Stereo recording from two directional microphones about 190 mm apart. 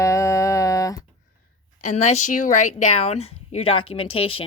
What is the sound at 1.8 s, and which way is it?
Speech, 35° left (ahead or behind).